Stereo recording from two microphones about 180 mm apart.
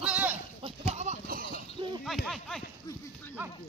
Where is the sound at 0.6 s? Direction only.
35° right (ahead or behind).